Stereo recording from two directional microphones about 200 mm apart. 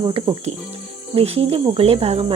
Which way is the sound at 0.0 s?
25° right (ahead or behind).